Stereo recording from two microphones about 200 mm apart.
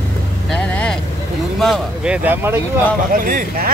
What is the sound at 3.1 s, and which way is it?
Speech, 45° right (ahead or behind).